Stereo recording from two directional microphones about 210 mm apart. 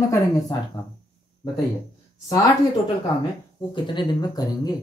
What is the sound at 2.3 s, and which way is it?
Speech, 15° left (ahead or behind).